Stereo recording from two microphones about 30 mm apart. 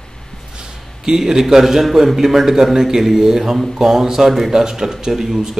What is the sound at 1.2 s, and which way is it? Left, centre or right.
A man's voice, centre.